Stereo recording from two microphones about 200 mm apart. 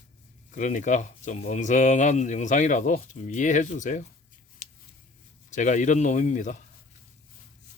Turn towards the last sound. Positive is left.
turn(degrees=40)  # may be behind; listen again after turning